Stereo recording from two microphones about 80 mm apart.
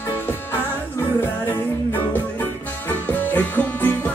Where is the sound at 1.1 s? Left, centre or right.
Left.